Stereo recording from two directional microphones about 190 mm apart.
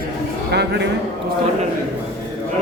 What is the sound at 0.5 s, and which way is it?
Speech, 60° right (ahead or behind).